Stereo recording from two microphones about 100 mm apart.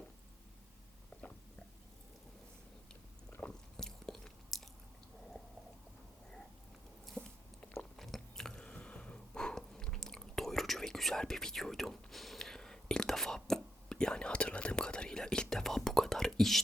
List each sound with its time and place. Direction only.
3.4 s biting: 5° left (ahead or behind)
7.2 s biting: 25° right (ahead or behind)
7.9 s biting: centre (ahead or behind)